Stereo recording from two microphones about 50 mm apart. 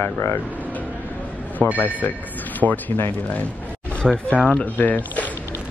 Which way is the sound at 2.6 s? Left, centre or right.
Right.